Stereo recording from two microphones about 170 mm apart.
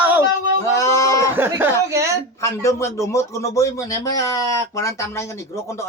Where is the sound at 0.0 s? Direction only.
10° right (ahead or behind).